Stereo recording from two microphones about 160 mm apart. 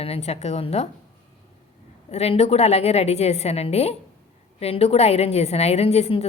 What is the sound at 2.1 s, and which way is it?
A woman's voice, 40° left (ahead or behind).